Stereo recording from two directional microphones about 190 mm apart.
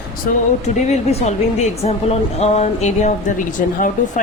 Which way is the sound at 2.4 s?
35° left (ahead or behind).